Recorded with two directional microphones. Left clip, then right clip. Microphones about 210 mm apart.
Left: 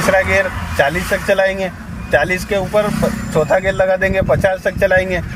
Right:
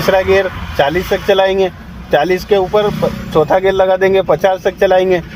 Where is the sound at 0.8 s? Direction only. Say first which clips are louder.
Right 2 dB; 30° right (ahead or behind).